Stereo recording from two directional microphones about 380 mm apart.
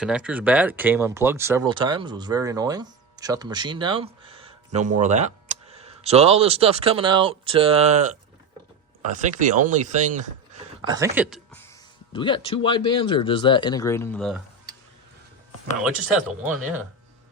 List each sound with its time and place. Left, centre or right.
0.0 s speech: centre
12.1 s speech: centre
16.4 s speech: centre